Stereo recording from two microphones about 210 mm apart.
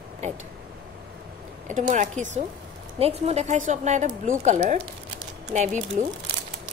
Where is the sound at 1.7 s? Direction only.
35° right (ahead or behind).